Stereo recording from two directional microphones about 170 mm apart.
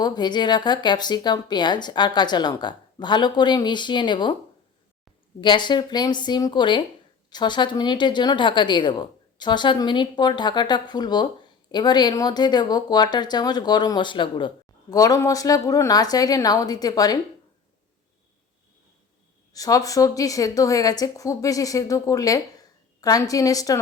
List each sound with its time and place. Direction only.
0.0 s speech: 25° left (ahead or behind)
5.4 s speech: 25° left (ahead or behind)
19.5 s speech: 20° left (ahead or behind)